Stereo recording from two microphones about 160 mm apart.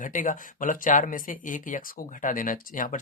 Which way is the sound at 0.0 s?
55° left (ahead or behind).